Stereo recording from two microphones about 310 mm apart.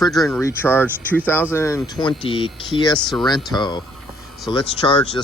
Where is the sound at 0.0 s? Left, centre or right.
Centre.